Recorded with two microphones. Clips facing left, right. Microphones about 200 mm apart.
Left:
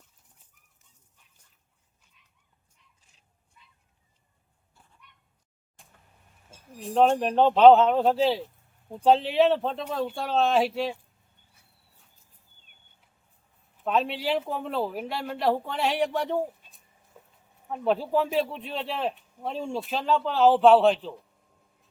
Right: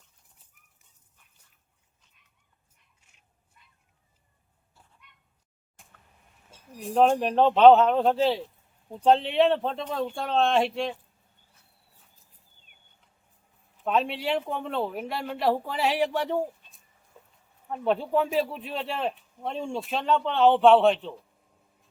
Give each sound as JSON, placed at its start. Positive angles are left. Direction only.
{"t": 6.9, "sound": "speech", "side_deg": 0}
{"t": 13.8, "sound": "speech", "side_deg": 0}
{"t": 17.2, "sound": "a sound", "side_deg": 10}
{"t": 17.7, "sound": "speech", "side_deg": 0}